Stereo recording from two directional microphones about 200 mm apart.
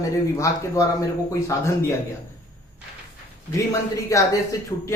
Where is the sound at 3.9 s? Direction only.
15° left (ahead or behind).